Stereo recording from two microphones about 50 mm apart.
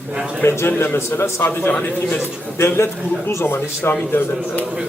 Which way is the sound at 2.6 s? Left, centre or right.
Left.